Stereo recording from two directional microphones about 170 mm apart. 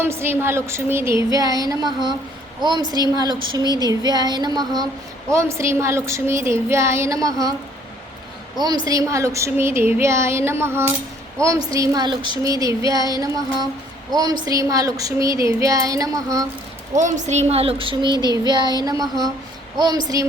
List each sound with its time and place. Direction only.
0.0 s a woman's voice: 15° right (ahead or behind)
8.5 s a woman's voice: 25° right (ahead or behind)
16.9 s speech: 45° right (ahead or behind); by 18.8 s 25° right (ahead or behind)
19.8 s speech: 25° right (ahead or behind)